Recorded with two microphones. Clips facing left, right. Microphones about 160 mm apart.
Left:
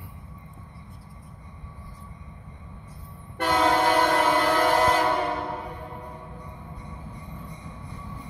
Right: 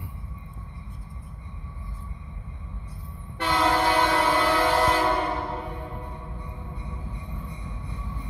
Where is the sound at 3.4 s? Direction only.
50° left (ahead or behind).